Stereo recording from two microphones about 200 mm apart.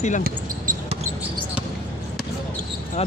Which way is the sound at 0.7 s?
40° right (ahead or behind).